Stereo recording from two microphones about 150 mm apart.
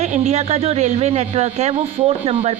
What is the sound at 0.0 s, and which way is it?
Speech, 45° right (ahead or behind).